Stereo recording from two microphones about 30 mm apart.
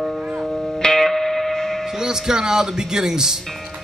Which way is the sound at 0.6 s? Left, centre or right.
Left.